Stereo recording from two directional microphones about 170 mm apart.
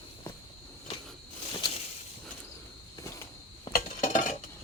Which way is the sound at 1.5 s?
30° left (ahead or behind).